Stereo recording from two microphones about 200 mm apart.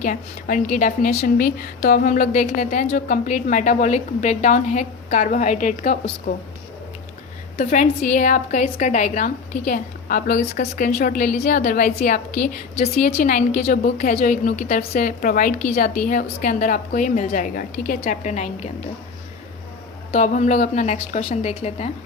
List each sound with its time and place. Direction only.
0.0 s a woman's voice: 40° left (ahead or behind)
7.6 s a woman's voice: 40° left (ahead or behind)
20.1 s a woman's voice: 40° left (ahead or behind)